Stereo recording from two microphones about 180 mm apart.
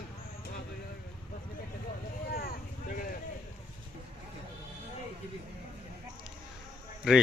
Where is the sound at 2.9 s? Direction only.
50° left (ahead or behind).